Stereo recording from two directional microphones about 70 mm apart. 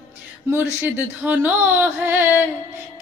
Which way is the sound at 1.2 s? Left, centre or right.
Right.